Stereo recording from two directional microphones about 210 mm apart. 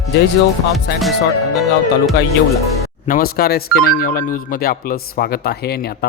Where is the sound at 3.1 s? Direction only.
45° left (ahead or behind).